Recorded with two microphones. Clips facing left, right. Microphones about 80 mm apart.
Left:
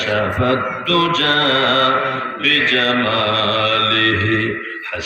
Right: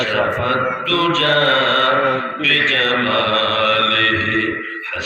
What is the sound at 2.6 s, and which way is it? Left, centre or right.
Mantra, left.